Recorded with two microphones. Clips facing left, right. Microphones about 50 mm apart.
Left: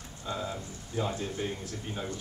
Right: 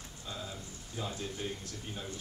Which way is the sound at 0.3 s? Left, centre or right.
Left.